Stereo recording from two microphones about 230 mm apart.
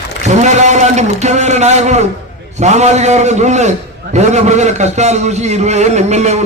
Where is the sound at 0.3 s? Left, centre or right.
Right.